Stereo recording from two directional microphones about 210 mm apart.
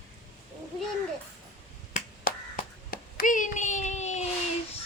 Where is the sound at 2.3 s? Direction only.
45° left (ahead or behind).